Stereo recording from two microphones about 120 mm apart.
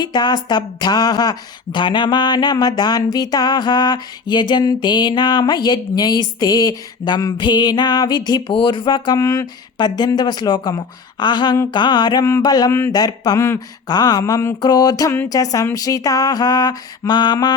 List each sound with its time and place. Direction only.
0.0 s speech: 35° left (ahead or behind)
9.1 s speech: 25° left (ahead or behind)